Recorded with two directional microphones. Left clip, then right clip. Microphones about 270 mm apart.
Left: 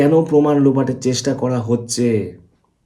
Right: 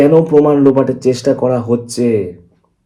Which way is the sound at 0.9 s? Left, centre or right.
Left.